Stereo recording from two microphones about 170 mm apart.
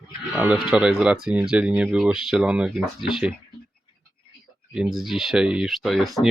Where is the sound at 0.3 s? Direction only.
10° right (ahead or behind).